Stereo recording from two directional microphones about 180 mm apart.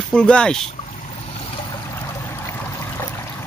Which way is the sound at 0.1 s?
5° left (ahead or behind).